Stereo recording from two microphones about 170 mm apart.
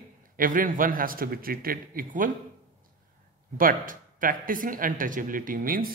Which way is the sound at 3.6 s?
55° right (ahead or behind).